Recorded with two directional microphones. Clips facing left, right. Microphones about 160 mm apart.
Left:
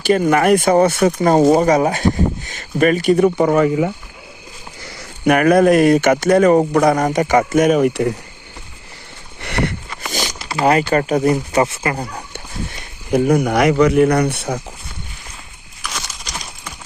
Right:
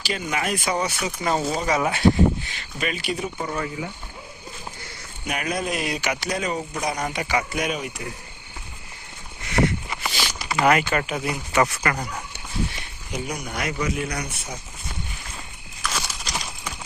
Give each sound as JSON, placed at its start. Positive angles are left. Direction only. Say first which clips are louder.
{"t": 0.0, "sound": "speech", "louder": "left 13 dB", "side_deg": 50}
{"t": 3.2, "sound": "speech", "louder": "left 15 dB", "side_deg": 90}
{"t": 4.9, "sound": "speech", "louder": "left 17 dB", "side_deg": 60}
{"t": 9.4, "sound": "a sound", "louder": "left 1 dB", "side_deg": 65}
{"t": 10.2, "sound": "a sound", "louder": "left 4 dB", "side_deg": 15}
{"t": 10.6, "sound": "speech", "louder": "left 5 dB", "side_deg": 35}
{"t": 11.6, "sound": "speech", "louder": "left 4 dB", "side_deg": 25}
{"t": 13.1, "sound": "speech", "louder": "left 16 dB", "side_deg": 55}
{"t": 15.8, "sound": "a sound", "louder": "even", "side_deg": -5}